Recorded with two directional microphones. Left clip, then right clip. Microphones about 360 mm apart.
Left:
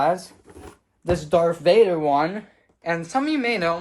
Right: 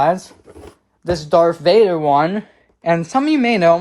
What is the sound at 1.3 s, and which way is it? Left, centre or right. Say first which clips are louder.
Speech: right 5 dB; right.